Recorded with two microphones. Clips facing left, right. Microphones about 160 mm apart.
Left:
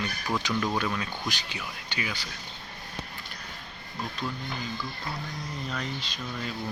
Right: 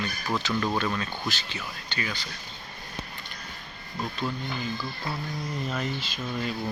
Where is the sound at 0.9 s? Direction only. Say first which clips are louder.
Right 1 dB; centre (ahead or behind).